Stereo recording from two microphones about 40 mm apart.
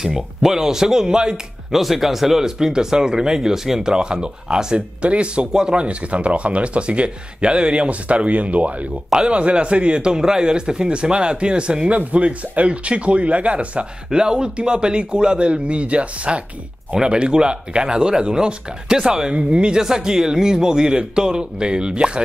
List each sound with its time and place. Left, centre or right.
0.0 s speech: centre
1.7 s speech: centre
4.7 s speech: right
9.1 s speech: right
11.9 s speech: right
14.1 s speech: right
16.9 s speech: right
19.8 s speech: centre